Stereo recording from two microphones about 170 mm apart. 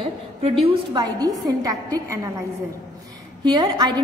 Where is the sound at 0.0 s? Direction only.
35° right (ahead or behind).